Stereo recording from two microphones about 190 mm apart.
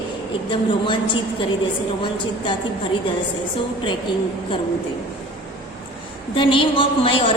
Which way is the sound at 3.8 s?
25° left (ahead or behind).